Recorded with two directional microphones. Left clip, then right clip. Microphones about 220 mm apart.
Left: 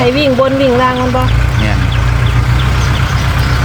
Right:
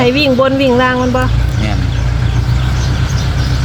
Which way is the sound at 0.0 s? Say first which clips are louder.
Even; 15° right (ahead or behind).